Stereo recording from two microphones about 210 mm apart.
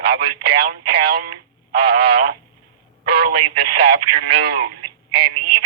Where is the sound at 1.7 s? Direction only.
50° right (ahead or behind).